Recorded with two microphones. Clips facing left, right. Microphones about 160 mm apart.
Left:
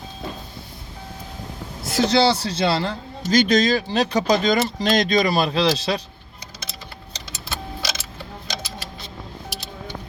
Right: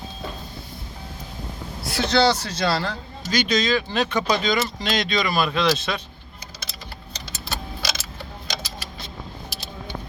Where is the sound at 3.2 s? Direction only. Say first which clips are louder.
Left 5 dB; 50° left (ahead or behind).